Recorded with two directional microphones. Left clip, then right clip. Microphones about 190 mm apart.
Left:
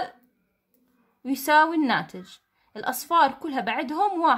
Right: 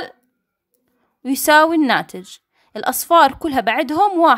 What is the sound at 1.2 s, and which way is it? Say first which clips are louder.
Speech: right 7 dB; 40° right (ahead or behind).